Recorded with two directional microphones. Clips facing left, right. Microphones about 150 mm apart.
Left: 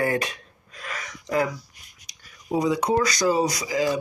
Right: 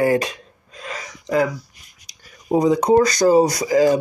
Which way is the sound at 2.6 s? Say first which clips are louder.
Right 7 dB; 45° right (ahead or behind).